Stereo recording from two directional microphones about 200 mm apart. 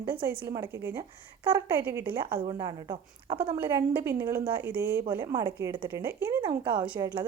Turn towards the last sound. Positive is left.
turn(degrees=-10)  # may be behind; listen again after turning